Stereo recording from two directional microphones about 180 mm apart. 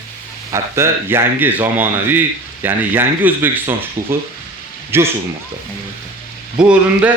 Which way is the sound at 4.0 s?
50° right (ahead or behind).